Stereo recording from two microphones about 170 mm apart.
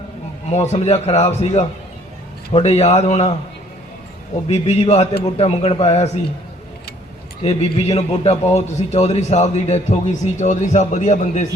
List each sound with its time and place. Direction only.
0.5 s a man's voice: 40° left (ahead or behind)
4.4 s a man's voice: 40° left (ahead or behind)
7.4 s a man's voice: 40° left (ahead or behind)